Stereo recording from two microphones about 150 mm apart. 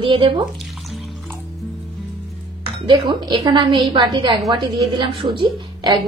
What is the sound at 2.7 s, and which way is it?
A woman's voice, 30° right (ahead or behind).